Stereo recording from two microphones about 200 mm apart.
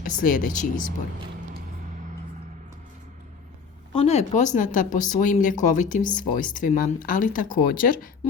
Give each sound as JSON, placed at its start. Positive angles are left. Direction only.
{"t": 0.0, "sound": "speech", "side_deg": 40}
{"t": 3.9, "sound": "speech", "side_deg": 35}